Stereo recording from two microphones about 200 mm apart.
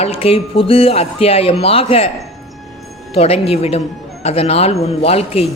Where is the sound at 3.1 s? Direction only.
30° left (ahead or behind).